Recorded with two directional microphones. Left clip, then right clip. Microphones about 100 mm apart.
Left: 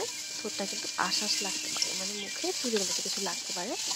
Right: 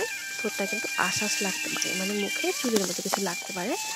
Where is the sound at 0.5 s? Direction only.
30° right (ahead or behind).